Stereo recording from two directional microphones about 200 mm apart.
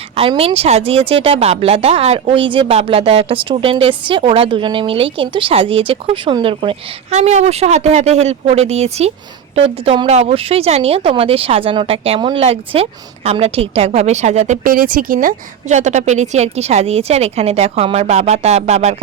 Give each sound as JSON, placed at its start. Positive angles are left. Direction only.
{"t": 0.2, "sound": "speech", "side_deg": -30}